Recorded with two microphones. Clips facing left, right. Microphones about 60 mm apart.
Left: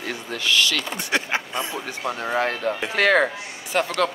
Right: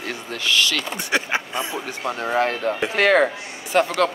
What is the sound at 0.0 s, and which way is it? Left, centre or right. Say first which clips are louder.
Speech: even; right.